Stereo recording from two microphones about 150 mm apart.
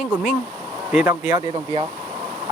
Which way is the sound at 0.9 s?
10° right (ahead or behind).